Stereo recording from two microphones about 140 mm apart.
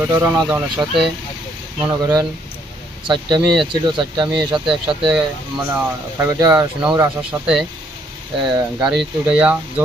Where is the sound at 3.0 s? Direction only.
30° right (ahead or behind).